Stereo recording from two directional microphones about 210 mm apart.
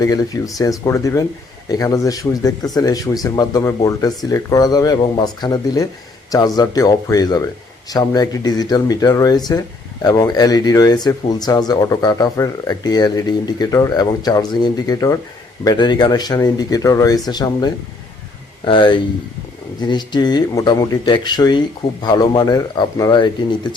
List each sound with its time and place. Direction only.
0.0 s speech: 15° left (ahead or behind)